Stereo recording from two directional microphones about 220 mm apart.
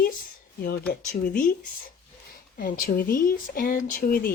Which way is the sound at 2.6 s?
40° left (ahead or behind).